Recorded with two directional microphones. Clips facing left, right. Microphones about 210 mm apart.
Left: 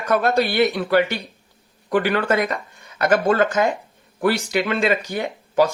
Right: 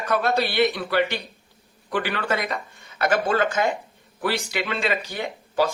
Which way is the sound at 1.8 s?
45° left (ahead or behind).